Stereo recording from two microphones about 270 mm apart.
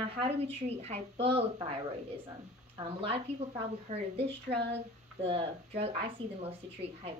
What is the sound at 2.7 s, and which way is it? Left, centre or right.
A woman's voice, right.